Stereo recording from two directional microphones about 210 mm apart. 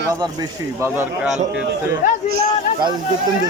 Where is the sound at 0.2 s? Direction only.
15° right (ahead or behind).